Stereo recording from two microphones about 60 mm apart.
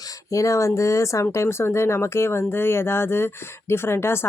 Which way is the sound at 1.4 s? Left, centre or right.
Left.